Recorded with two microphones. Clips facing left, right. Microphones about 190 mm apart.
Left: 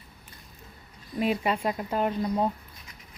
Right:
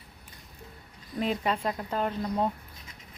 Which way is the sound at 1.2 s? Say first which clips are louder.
Left 2 dB; 10° left (ahead or behind).